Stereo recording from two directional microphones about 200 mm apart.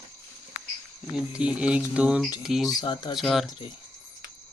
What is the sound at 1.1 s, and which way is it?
Speech, 5° right (ahead or behind).